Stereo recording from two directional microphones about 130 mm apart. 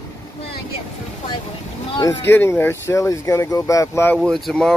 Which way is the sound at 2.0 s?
20° left (ahead or behind).